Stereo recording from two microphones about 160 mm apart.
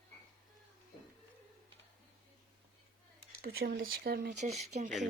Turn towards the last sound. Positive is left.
turn(degrees=-45)  # may be behind; listen again after turning